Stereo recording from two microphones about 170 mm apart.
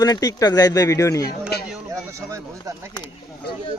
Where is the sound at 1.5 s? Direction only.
70° left (ahead or behind).